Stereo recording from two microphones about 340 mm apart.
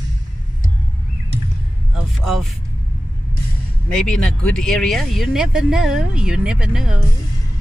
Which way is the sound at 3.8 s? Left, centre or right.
Centre.